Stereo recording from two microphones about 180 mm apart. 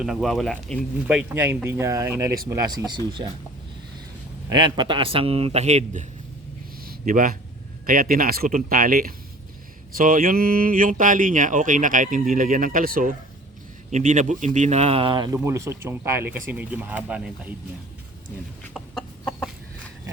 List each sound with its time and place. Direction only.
0.0 s speech: centre (ahead or behind)
1.0 s speech: 10° right (ahead or behind); by 3.2 s 25° right (ahead or behind)
4.4 s a man's voice: 25° right (ahead or behind); by 6.1 s 40° right (ahead or behind)
6.8 s a sound: 50° right (ahead or behind)
7.9 s speech: 50° right (ahead or behind); by 17.5 s 5° right (ahead or behind)
18.7 s chicken: 5° left (ahead or behind)